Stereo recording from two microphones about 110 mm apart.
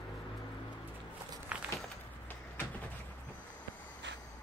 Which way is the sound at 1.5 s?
10° right (ahead or behind).